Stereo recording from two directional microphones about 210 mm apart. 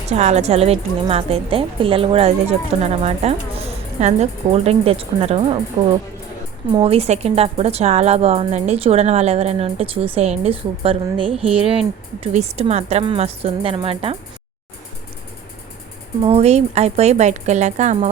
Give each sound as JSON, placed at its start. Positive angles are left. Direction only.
{"t": 0.1, "sound": "a woman's voice", "side_deg": -30}
{"t": 11.3, "sound": "speech", "side_deg": -5}
{"t": 12.2, "sound": "a woman's voice", "side_deg": -30}
{"t": 16.2, "sound": "speech", "side_deg": -30}